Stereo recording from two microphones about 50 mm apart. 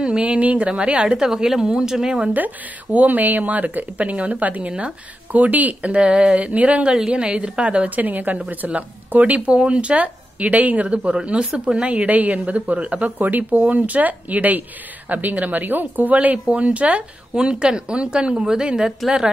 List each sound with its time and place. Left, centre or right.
0.0 s speech: right
1.1 s speech: centre
2.3 s speech: right
6.9 s speech: centre